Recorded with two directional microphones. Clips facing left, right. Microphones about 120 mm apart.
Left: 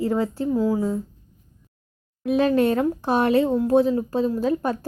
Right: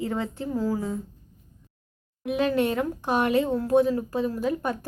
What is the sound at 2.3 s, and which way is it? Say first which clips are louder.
Speech: left 5 dB; 35° left (ahead or behind).